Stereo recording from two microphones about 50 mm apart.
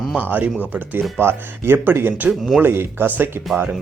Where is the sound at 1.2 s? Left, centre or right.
Right.